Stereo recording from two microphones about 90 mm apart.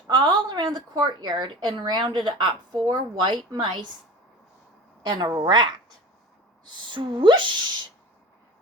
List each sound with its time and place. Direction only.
0.1 s a woman's voice: 60° right (ahead or behind)
5.0 s speech: 50° right (ahead or behind)